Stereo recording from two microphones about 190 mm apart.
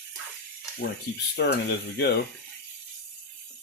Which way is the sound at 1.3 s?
60° left (ahead or behind).